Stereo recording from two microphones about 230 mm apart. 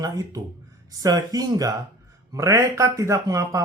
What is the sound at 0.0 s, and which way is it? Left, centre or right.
Speech, centre.